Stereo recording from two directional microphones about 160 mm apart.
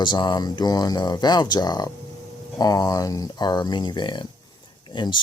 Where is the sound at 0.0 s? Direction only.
30° left (ahead or behind).